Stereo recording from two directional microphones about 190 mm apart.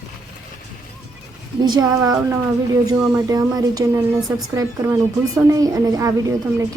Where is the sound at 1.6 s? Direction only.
20° right (ahead or behind).